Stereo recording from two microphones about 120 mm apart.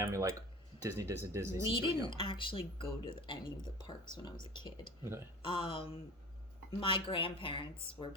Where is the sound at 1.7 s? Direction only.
45° left (ahead or behind).